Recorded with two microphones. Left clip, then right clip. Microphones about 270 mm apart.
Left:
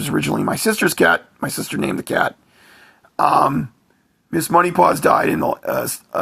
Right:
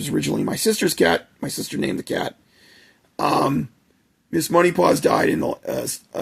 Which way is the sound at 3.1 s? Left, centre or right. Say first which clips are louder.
Left 5 dB; centre.